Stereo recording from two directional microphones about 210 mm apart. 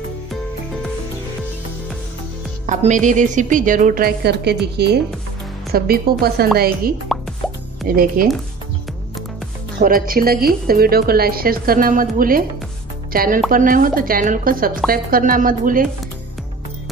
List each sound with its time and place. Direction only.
2.6 s a woman's voice: 35° right (ahead or behind)
7.1 s plop: centre (ahead or behind)
7.9 s a woman's voice: 40° right (ahead or behind)
9.8 s a woman's voice: 40° right (ahead or behind)